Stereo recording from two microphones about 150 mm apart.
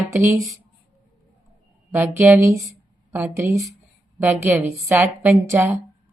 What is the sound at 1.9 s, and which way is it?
A woman's voice, 20° right (ahead or behind).